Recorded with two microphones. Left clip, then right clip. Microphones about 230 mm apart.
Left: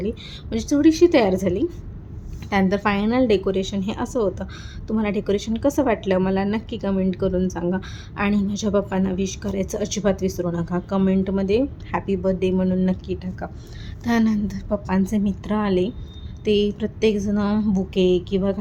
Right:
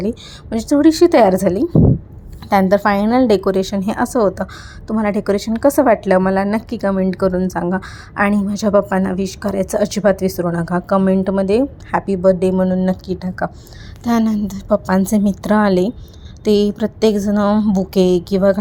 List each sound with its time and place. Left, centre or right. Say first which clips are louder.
0.0 s speech: right 5 dB; right